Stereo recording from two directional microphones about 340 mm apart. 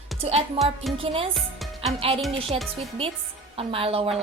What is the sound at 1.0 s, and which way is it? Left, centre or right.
Speech, centre.